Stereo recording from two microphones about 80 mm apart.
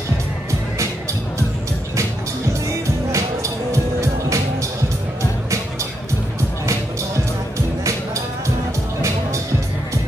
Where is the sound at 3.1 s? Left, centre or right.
Right.